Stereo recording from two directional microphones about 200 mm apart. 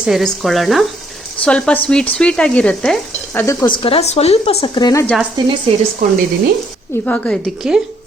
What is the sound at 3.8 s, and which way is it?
Speech, 30° left (ahead or behind).